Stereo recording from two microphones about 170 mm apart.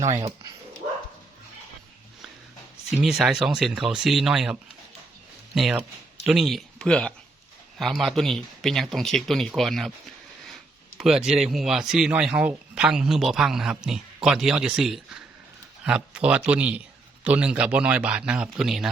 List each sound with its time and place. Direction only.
0.1 s speech: 30° right (ahead or behind)
3.0 s speech: 5° right (ahead or behind)
5.5 s a man's voice: 5° right (ahead or behind)